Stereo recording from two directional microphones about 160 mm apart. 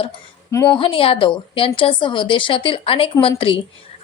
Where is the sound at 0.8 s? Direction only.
35° left (ahead or behind).